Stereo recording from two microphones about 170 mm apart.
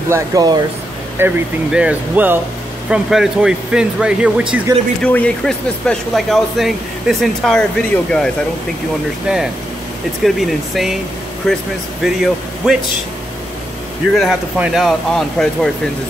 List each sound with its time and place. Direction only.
0.1 s speech: 20° right (ahead or behind)
1.1 s speech: 10° right (ahead or behind)
5.0 s speech: 5° left (ahead or behind)
10.2 s speech: centre (ahead or behind)
14.1 s speech: centre (ahead or behind)